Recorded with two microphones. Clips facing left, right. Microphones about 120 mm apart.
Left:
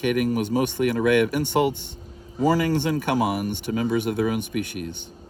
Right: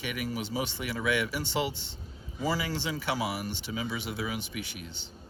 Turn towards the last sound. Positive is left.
turn(degrees=55)  # may be behind; listen again after turning